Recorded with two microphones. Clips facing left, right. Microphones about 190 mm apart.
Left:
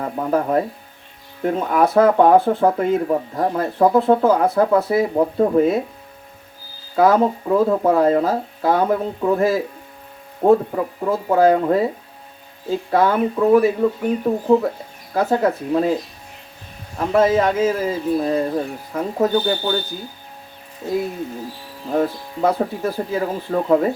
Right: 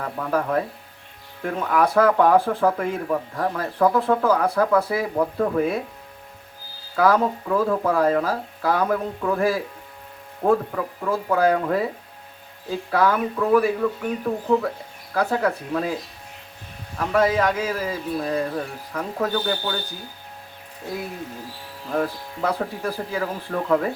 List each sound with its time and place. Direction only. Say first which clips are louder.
0.0 s speech: left 4 dB; 25° left (ahead or behind)
6.9 s speech: left 4 dB; 25° left (ahead or behind)
12.9 s speech: left 3 dB; 25° left (ahead or behind)
17.0 s speech: left 4 dB; 25° left (ahead or behind)
21.8 s speech: left 5 dB; 25° left (ahead or behind)